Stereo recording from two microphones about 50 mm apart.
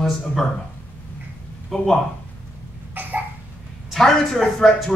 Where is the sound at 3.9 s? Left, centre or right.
Centre.